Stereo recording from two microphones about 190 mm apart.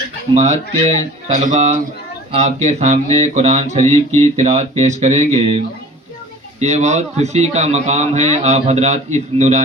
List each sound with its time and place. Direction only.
0.3 s a man's voice: 35° right (ahead or behind)